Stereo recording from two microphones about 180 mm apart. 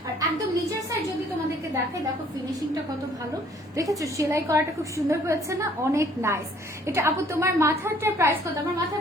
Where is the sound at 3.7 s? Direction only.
20° right (ahead or behind).